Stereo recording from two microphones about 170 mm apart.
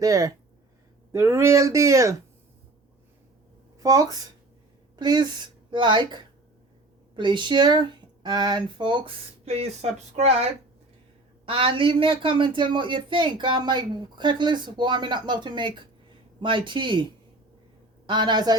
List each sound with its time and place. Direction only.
0.0 s speech: 20° right (ahead or behind)
3.8 s speech: 20° right (ahead or behind)